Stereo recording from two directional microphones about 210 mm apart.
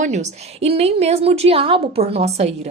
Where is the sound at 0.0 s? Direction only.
35° right (ahead or behind).